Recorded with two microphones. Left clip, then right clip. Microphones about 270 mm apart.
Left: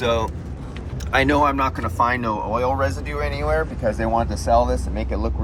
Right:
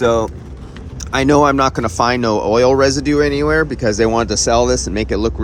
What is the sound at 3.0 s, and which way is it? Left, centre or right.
Speech, right.